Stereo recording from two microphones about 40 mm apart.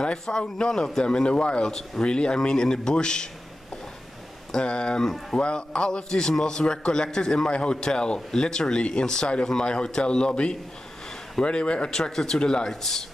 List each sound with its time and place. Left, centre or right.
0.0 s speech: left
4.5 s speech: left
11.9 s speech: centre
12.4 s speech: centre